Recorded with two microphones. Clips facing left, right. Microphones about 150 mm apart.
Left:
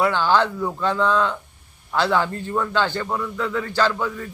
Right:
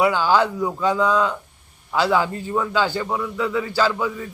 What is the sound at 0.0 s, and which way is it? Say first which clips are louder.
A man's voice: right 1 dB; 10° right (ahead or behind).